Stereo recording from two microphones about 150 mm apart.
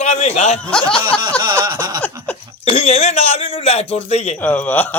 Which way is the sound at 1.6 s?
30° right (ahead or behind).